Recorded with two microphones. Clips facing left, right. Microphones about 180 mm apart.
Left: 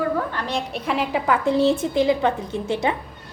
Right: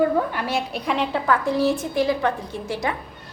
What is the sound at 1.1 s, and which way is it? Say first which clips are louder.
A woman's voice: left 4 dB; 20° left (ahead or behind).